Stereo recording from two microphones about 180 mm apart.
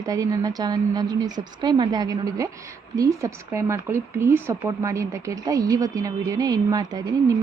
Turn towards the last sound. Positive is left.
turn(degrees=-20)  # may be behind; listen again after turning